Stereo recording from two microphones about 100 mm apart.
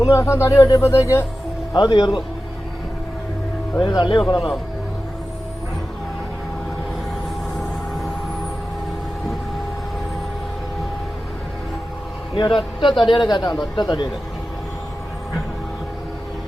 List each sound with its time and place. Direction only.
0.0 s speech: 30° left (ahead or behind)
1.7 s speech: 45° left (ahead or behind)
3.8 s speech: 45° left (ahead or behind)
4.4 s speech: centre (ahead or behind)
7.5 s a sound: centre (ahead or behind)
12.4 s speech: 55° left (ahead or behind)